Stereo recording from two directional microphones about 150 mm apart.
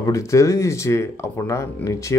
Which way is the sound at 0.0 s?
20° left (ahead or behind).